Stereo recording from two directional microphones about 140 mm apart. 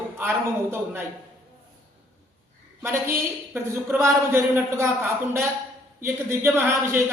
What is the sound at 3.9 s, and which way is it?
A man's voice, 15° right (ahead or behind).